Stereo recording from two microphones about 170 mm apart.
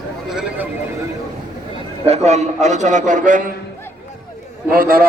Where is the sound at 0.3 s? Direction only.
5° right (ahead or behind).